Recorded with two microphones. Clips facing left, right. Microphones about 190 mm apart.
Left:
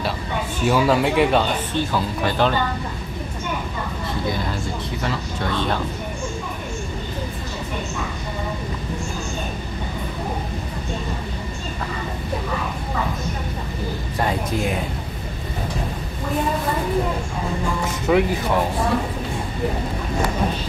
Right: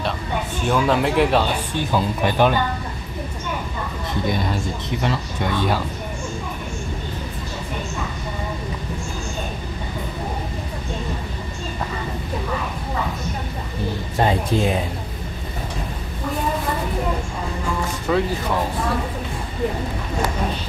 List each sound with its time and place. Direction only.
0.7 s speech: 5° left (ahead or behind)
1.8 s speech: 15° right (ahead or behind)
5.0 s speech: 15° right (ahead or behind)
14.1 s speech: 25° right (ahead or behind)
18.1 s speech: 10° left (ahead or behind)